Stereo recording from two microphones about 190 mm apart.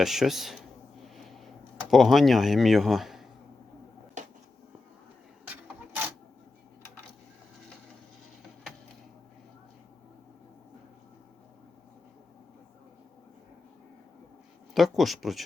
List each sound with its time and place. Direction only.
0.0 s speech: centre (ahead or behind)
1.9 s speech: centre (ahead or behind)
4.2 s a sound: 40° right (ahead or behind)
14.7 s speech: centre (ahead or behind)